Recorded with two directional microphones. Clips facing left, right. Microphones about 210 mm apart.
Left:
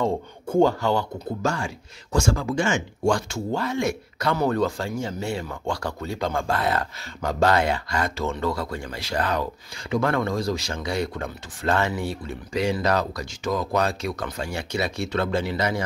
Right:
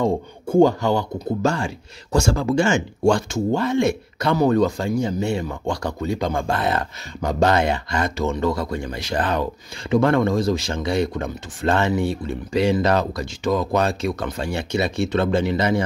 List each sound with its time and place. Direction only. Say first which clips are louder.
0.0 s speech: right 4 dB; 15° right (ahead or behind)
1.4 s speech: right 3 dB; 30° right (ahead or behind)
3.5 s speech: right 5 dB; 25° right (ahead or behind)